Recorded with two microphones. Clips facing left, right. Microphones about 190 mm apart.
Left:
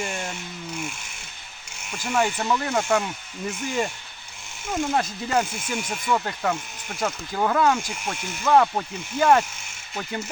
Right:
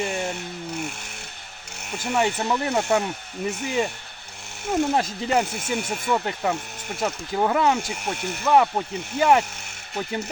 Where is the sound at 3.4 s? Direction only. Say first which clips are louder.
Right 3 dB; 65° right (ahead or behind).